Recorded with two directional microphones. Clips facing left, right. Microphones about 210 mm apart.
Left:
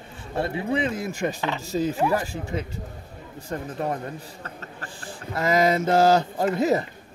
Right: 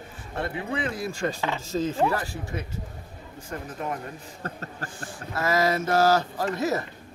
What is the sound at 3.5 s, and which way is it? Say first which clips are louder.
Speech: left 4 dB; 35° left (ahead or behind).